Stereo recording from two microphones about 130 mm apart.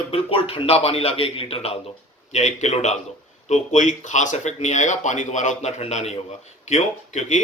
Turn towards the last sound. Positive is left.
turn(degrees=65)  # may be behind; listen again after turning